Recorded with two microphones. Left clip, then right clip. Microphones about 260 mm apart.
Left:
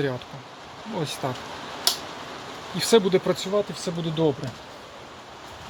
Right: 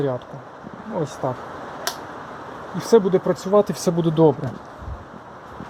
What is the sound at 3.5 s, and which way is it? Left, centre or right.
Speech, right.